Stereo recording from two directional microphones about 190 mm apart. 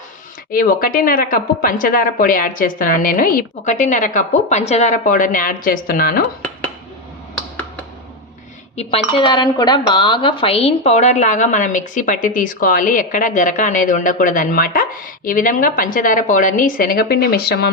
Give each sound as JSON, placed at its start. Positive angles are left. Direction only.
{"t": 0.5, "sound": "speech", "side_deg": 50}
{"t": 8.7, "sound": "speech", "side_deg": 35}